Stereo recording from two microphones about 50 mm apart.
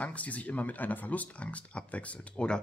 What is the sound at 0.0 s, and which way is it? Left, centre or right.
Speech, left.